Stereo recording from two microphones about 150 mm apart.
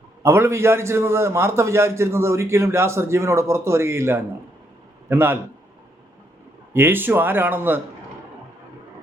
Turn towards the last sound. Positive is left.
turn(degrees=-15)  # may be behind; listen again after turning